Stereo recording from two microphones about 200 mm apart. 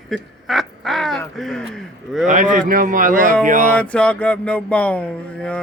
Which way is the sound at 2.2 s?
40° right (ahead or behind).